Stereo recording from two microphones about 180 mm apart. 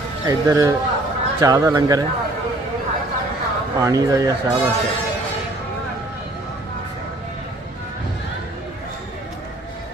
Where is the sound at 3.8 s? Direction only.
20° right (ahead or behind).